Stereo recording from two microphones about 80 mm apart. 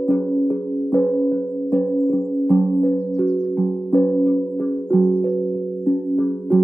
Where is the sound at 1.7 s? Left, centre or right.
Centre.